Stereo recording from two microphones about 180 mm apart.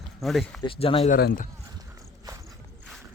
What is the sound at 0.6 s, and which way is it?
Speech, 30° left (ahead or behind).